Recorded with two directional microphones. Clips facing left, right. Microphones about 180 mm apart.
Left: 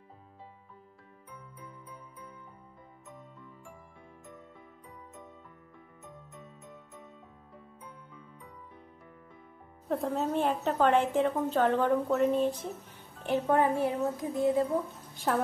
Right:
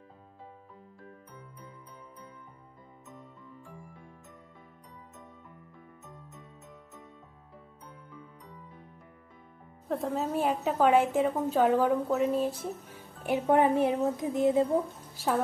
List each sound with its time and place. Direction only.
9.8 s a woman's voice: centre (ahead or behind)
13.2 s speech: 15° right (ahead or behind)
15.1 s speech: centre (ahead or behind)